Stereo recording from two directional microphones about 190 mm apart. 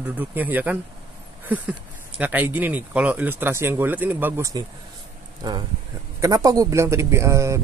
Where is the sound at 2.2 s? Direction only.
10° right (ahead or behind).